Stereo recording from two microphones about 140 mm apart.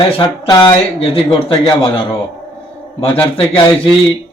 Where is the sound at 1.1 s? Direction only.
35° left (ahead or behind).